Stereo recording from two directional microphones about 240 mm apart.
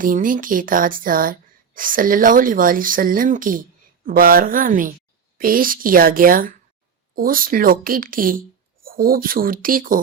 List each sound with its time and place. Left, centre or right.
0.0 s speech: right